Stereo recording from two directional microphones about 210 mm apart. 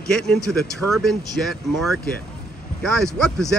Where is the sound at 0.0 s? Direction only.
5° left (ahead or behind).